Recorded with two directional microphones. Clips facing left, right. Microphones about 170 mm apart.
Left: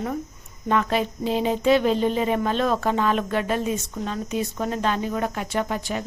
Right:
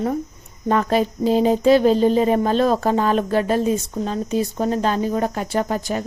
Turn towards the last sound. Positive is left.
turn(degrees=-40)  # may be behind; listen again after turning